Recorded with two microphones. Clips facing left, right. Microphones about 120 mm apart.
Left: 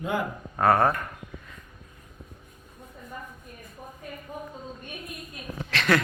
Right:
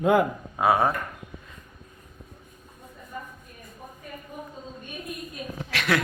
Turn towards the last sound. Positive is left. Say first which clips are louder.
# left 2 dB
turn(degrees=-5)  # may be behind; listen again after turning